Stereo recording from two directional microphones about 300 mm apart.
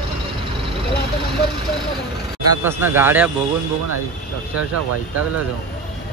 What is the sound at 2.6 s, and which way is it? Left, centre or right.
Speech, centre.